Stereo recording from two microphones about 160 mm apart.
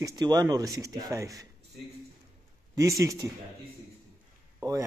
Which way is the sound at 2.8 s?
20° right (ahead or behind).